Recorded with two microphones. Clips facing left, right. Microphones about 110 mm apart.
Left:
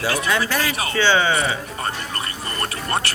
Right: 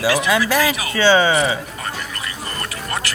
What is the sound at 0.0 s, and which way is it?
Speech, 10° right (ahead or behind).